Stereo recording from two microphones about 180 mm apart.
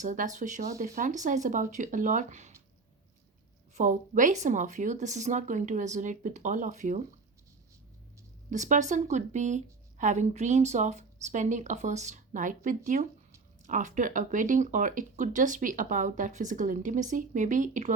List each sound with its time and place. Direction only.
0.0 s speech: 45° right (ahead or behind)
3.8 s speech: 45° right (ahead or behind)
8.4 s speech: 45° right (ahead or behind)